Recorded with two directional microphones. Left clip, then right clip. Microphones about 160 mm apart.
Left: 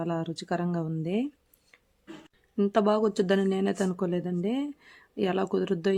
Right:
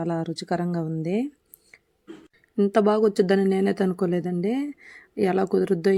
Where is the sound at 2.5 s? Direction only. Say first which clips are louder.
Right 4 dB; 20° right (ahead or behind).